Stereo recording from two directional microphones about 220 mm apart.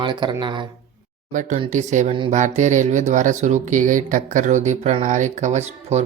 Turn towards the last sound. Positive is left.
turn(degrees=-30)  # may be behind; listen again after turning